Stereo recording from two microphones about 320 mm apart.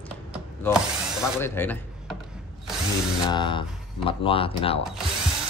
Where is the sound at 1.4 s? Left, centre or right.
Centre.